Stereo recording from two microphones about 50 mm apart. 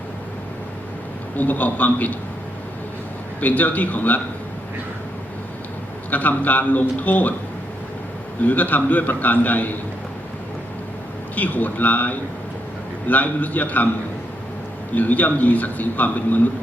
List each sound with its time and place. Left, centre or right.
1.4 s a man's voice: left
3.4 s a man's voice: left
6.1 s a man's voice: left
8.4 s a man's voice: left
11.3 s a man's voice: left
14.9 s a man's voice: left